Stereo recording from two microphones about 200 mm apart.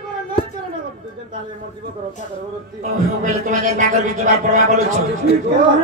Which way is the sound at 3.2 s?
40° right (ahead or behind).